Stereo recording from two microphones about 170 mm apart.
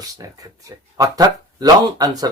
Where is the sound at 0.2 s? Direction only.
20° right (ahead or behind).